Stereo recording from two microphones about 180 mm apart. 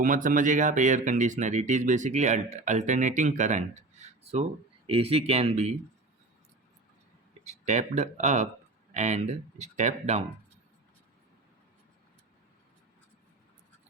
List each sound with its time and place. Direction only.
0.0 s speech: 45° right (ahead or behind)
7.4 s speech: 40° right (ahead or behind)